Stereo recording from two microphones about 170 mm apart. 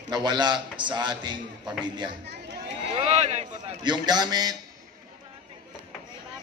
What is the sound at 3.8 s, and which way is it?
Speech, 25° right (ahead or behind).